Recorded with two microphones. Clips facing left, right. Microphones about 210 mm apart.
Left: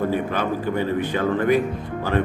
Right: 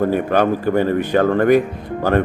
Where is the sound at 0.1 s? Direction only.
55° right (ahead or behind).